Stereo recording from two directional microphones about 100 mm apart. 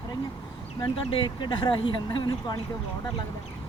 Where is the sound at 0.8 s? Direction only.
60° left (ahead or behind).